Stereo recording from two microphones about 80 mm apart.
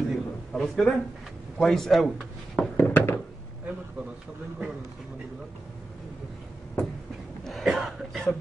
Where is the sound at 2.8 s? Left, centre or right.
Left.